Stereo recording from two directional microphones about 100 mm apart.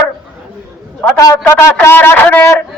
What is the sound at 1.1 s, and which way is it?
A man's voice, 35° left (ahead or behind).